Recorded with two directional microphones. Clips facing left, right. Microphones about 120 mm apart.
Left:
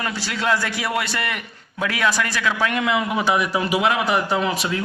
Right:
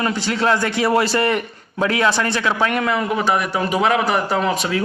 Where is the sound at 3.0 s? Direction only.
35° right (ahead or behind).